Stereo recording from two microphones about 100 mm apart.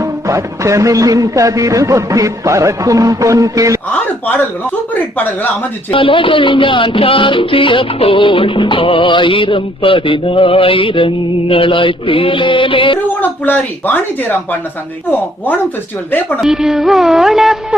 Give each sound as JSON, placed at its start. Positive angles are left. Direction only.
{"t": 0.0, "sound": "a sound", "side_deg": -30}
{"t": 4.9, "sound": "a woman's voice", "side_deg": 15}
{"t": 5.9, "sound": "speech", "side_deg": 60}
{"t": 13.2, "sound": "a woman's voice", "side_deg": 20}
{"t": 16.4, "sound": "speech", "side_deg": -5}